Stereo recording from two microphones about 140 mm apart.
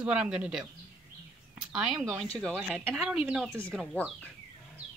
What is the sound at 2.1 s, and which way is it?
Speech, 5° left (ahead or behind).